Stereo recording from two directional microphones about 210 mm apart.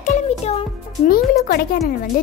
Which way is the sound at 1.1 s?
45° left (ahead or behind).